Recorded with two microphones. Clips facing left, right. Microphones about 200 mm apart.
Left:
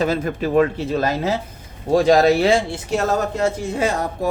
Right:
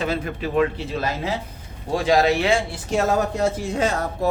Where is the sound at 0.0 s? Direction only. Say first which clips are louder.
Left 5 dB; 40° left (ahead or behind).